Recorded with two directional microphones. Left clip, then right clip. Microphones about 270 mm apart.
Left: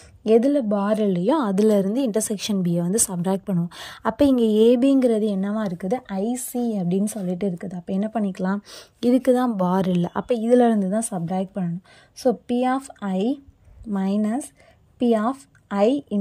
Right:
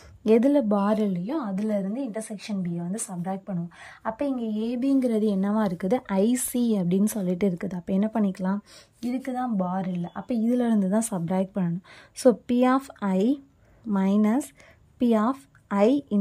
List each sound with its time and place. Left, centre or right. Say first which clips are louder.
0.2 s a woman's voice: left 2 dB; centre
1.3 s a woman's voice: left 9 dB; centre
10.4 s a woman's voice: left 8 dB; centre